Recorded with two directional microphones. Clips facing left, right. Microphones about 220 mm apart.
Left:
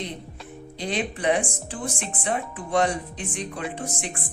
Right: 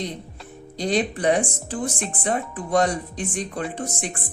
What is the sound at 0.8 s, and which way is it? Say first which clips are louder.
Speech: right 5 dB; 40° right (ahead or behind).